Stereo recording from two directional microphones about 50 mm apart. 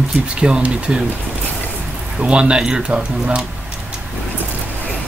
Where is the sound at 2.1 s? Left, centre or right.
Right.